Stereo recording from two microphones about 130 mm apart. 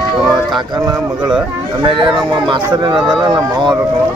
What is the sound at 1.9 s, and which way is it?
Speech, 40° right (ahead or behind).